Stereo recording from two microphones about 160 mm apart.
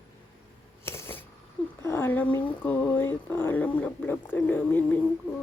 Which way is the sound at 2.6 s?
10° left (ahead or behind).